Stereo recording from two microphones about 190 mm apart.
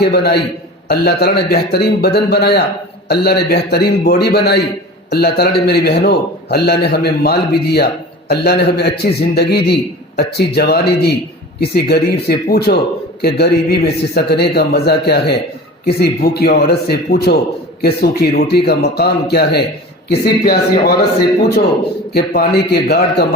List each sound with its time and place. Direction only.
0.0 s a man's voice: 60° left (ahead or behind)